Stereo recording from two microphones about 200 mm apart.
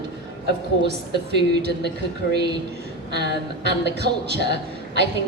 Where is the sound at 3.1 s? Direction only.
55° right (ahead or behind).